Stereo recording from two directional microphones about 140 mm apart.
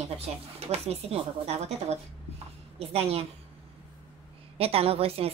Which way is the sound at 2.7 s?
45° right (ahead or behind).